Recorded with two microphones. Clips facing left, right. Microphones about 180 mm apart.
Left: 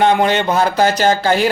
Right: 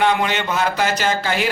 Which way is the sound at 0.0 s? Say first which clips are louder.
Left 5 dB; 35° left (ahead or behind).